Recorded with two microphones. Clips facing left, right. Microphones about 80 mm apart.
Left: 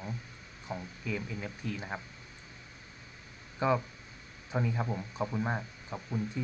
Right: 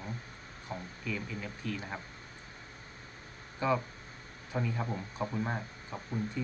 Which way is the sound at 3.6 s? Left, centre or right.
Left.